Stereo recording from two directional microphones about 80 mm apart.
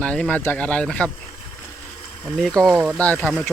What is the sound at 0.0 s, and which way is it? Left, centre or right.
Speech, centre.